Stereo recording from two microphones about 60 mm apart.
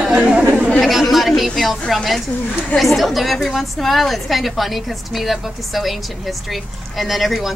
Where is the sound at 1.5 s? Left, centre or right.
Centre.